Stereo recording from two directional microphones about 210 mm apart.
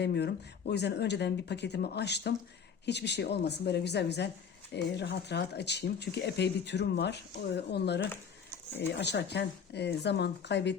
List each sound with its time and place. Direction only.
0.0 s speech: 50° left (ahead or behind)
8.1 s a sound: 10° left (ahead or behind)
8.8 s speech: 55° left (ahead or behind)